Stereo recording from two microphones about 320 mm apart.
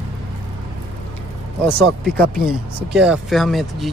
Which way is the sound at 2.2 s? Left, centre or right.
Right.